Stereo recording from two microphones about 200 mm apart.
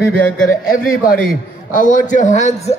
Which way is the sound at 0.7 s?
45° left (ahead or behind).